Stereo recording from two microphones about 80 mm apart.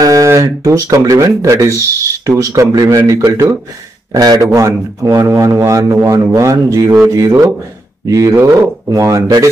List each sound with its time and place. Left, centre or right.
0.0 s speech: right
4.1 s speech: right